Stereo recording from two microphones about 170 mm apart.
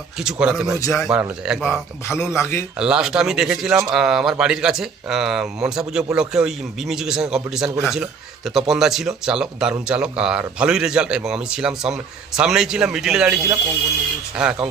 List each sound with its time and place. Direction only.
0.2 s speech: 5° right (ahead or behind)
0.8 s speech: 15° left (ahead or behind)
1.2 s speech: 5° right (ahead or behind)
2.0 s speech: 15° left (ahead or behind)
2.7 s speech: 5° right (ahead or behind)